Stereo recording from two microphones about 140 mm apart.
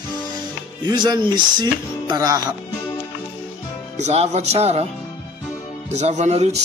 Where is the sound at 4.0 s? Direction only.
50° right (ahead or behind).